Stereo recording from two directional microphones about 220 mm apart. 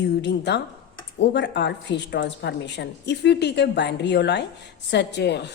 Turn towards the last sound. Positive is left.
turn(degrees=50)  # may be behind; listen again after turning